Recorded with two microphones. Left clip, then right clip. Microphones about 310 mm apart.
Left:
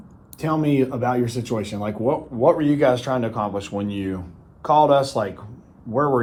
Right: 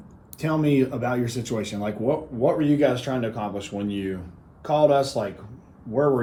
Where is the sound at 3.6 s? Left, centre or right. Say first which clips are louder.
Left 3 dB; centre.